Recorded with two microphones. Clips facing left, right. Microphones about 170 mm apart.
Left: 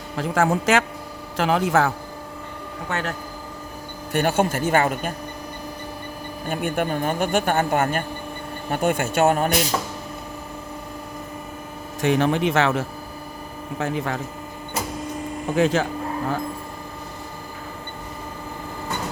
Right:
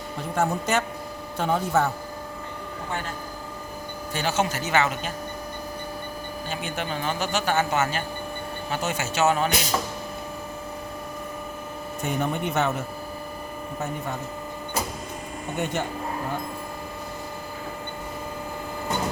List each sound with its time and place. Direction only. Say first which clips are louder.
0.2 s speech: left 5 dB; 90° left
2.9 s speech: left 5 dB; 80° left
4.1 s a man's voice: left 5 dB; 60° left (ahead or behind)
6.5 s a man's voice: left 8 dB; 55° left (ahead or behind)
12.0 s speech: left 8 dB; 90° left
15.5 s speech: left 8 dB; 90° left